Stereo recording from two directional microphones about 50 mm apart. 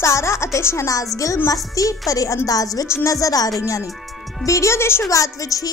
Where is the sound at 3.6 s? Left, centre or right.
Left.